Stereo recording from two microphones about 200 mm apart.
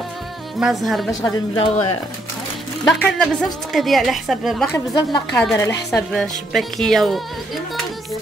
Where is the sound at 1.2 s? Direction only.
25° left (ahead or behind).